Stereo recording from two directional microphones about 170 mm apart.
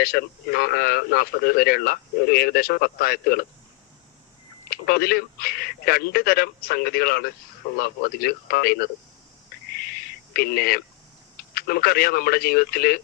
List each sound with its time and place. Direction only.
0.0 s speech: 65° left (ahead or behind)
4.7 s speech: 65° left (ahead or behind)
9.7 s a sound: 65° left (ahead or behind)
11.5 s speech: 65° left (ahead or behind)